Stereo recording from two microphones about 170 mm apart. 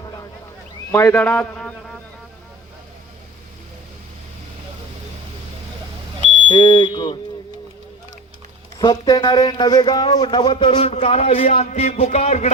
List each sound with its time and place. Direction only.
0.0 s a sound: 20° left (ahead or behind); by 2.0 s 5° left (ahead or behind)
6.5 s speech: 30° left (ahead or behind)
8.8 s a man's voice: 25° left (ahead or behind); by 12.5 s 40° left (ahead or behind)